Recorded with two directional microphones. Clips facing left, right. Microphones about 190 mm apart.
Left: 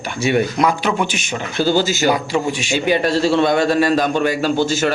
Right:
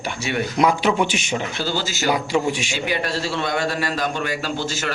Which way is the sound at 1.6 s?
45° left (ahead or behind).